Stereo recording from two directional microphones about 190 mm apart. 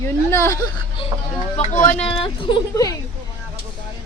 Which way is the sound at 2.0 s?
25° left (ahead or behind).